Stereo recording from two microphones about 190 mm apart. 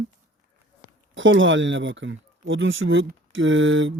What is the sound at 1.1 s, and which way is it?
Speech, 85° right.